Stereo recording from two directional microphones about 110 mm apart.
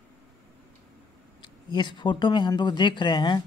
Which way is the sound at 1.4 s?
45° left (ahead or behind).